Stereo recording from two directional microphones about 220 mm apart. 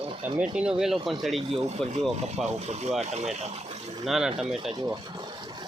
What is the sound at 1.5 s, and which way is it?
Speech, 30° right (ahead or behind).